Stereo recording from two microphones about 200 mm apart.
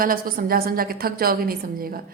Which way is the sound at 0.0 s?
45° right (ahead or behind).